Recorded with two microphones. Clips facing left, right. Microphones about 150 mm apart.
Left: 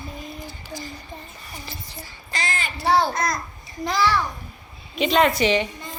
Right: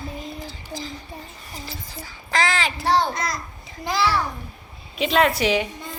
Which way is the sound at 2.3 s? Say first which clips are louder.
Right 7 dB; 90° right.